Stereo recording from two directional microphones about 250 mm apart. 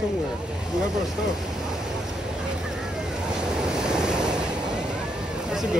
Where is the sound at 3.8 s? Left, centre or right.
Centre.